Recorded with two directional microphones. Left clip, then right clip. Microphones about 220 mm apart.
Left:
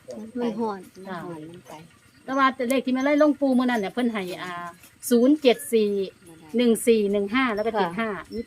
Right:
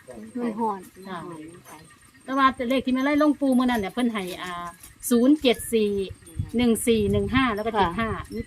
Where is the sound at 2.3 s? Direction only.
5° left (ahead or behind).